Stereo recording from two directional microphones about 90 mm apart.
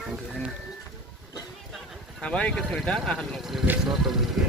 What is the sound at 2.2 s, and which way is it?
Speech, 10° left (ahead or behind).